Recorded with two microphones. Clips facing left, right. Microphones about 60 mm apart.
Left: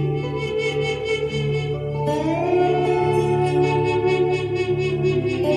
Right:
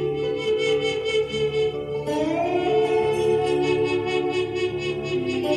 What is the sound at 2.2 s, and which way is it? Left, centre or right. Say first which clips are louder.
Music: left 4 dB; left.